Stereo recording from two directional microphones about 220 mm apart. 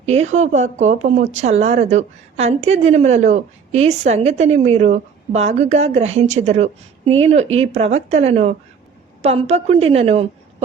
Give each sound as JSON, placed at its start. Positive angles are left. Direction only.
{"t": 0.0, "sound": "a woman's voice", "side_deg": -30}